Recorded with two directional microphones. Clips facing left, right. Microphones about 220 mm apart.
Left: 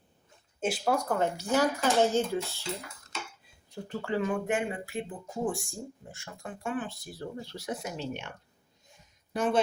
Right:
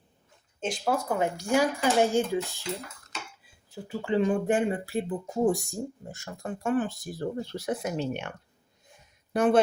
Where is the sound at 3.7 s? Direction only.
5° right (ahead or behind).